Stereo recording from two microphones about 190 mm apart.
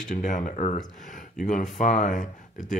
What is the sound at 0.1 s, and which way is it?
Speech, 40° left (ahead or behind).